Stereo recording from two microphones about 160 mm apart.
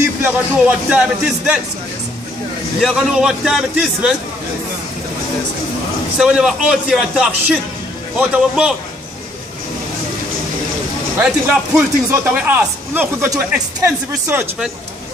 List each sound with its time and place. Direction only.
0.2 s speech: 5° right (ahead or behind)
2.8 s speech: centre (ahead or behind)
6.1 s speech: 5° right (ahead or behind)
11.1 s a man's voice: 10° right (ahead or behind)